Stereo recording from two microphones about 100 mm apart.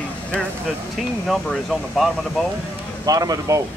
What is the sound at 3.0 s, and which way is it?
Speech, 35° right (ahead or behind).